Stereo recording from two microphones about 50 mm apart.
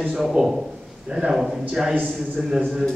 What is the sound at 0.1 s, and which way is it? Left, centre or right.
A man's voice, centre.